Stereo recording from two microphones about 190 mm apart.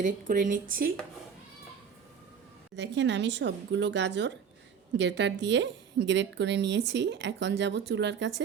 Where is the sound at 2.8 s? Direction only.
65° right (ahead or behind).